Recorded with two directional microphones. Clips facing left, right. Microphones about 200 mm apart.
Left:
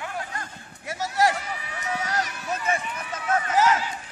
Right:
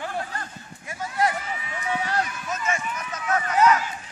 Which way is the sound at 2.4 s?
35° left (ahead or behind).